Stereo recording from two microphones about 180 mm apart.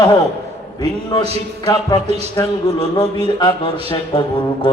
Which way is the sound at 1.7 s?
20° left (ahead or behind).